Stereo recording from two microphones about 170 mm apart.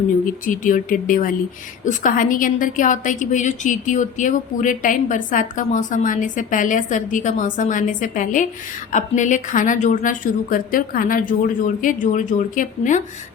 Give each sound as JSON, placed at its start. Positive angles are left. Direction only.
{"t": 0.4, "sound": "a woman's voice", "side_deg": 50}